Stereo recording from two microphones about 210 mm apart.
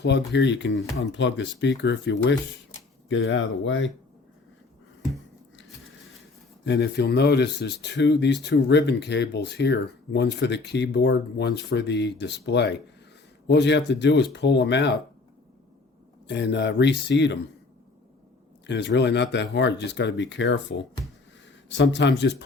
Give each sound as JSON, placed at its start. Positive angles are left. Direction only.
{"t": 0.3, "sound": "speech", "side_deg": 55}
{"t": 6.7, "sound": "speech", "side_deg": 50}
{"t": 16.2, "sound": "speech", "side_deg": 55}
{"t": 18.6, "sound": "speech", "side_deg": 55}